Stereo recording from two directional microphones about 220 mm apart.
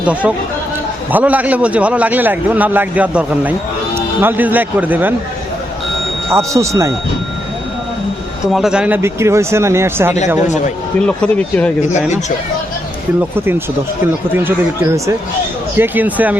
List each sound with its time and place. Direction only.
0.0 s a man's voice: 5° right (ahead or behind)
6.3 s a man's voice: 15° right (ahead or behind)
8.4 s a man's voice: centre (ahead or behind)
10.4 s a man's voice: 35° left (ahead or behind)
11.0 s speech: 5° left (ahead or behind)
15.8 s a man's voice: 5° right (ahead or behind)